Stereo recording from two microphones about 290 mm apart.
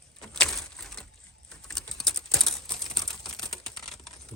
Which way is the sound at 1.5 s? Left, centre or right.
Centre.